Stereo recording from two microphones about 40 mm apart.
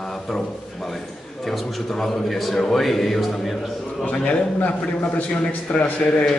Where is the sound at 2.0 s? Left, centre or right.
Centre.